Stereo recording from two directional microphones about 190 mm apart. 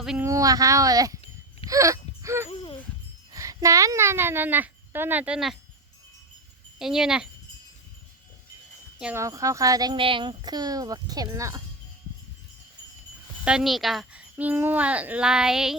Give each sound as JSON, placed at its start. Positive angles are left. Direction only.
{"t": 0.0, "sound": "speech", "side_deg": -5}
{"t": 0.3, "sound": "speech", "side_deg": -20}
{"t": 2.5, "sound": "a sound", "side_deg": 30}
{"t": 3.3, "sound": "speech", "side_deg": -15}
{"t": 6.7, "sound": "a child's voice", "side_deg": -5}
{"t": 9.0, "sound": "speech", "side_deg": -5}
{"t": 9.2, "sound": "speech", "side_deg": -15}
{"t": 13.4, "sound": "a child's voice", "side_deg": -5}